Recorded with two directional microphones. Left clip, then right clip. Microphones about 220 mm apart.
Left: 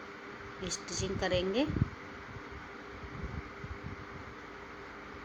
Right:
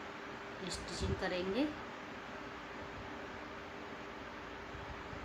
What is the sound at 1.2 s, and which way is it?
Speech, 20° left (ahead or behind).